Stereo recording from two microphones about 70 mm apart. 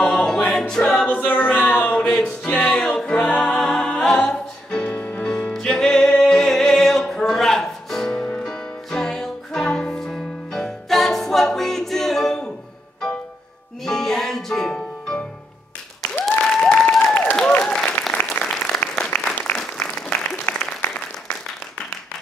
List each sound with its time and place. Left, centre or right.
0.0 s choir: centre
1.0 s a sound: left
2.4 s music: centre
3.5 s a capella: centre
3.8 s music: centre
13.8 s music: centre
16.3 s applause: centre
17.0 s applause: left
18.4 s applause: centre
19.1 s applause: left